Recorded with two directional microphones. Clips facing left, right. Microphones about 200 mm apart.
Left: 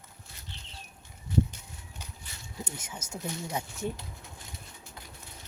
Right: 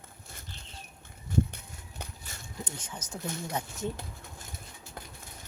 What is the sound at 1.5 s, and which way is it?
Walk, 55° right (ahead or behind).